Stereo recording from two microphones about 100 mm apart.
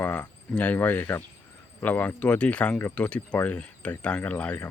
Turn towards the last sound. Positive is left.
turn(degrees=15)  # may be behind; listen again after turning